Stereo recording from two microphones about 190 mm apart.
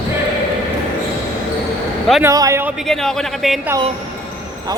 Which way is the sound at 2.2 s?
15° right (ahead or behind).